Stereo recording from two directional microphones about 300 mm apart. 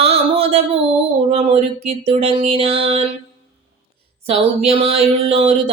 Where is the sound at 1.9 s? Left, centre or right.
Centre.